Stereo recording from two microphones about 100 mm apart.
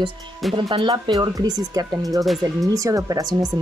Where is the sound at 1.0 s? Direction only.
40° right (ahead or behind).